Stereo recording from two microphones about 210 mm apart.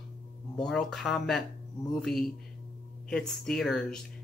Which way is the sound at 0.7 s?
Centre (ahead or behind).